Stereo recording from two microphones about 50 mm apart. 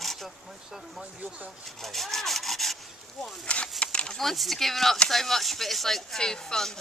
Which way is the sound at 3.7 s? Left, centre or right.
Left.